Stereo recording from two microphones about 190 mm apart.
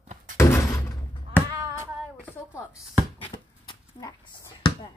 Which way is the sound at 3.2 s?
20° left (ahead or behind).